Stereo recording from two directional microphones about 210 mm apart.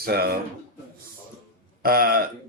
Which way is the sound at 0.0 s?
45° right (ahead or behind).